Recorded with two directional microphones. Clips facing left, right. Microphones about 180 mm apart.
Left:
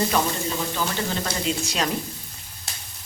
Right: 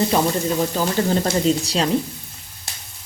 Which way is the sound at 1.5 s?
30° right (ahead or behind).